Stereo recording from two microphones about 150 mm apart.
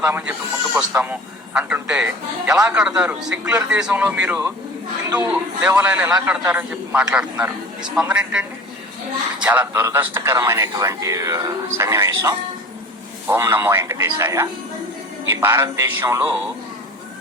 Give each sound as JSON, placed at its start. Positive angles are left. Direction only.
{"t": 0.0, "sound": "a man's voice", "side_deg": -10}